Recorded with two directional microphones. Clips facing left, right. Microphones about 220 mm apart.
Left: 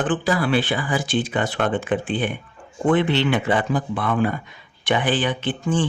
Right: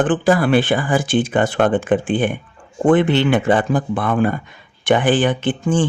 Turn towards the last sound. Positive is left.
turn(degrees=-50)  # may be behind; listen again after turning